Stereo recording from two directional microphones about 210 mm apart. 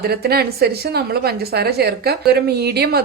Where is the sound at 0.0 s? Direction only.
50° right (ahead or behind).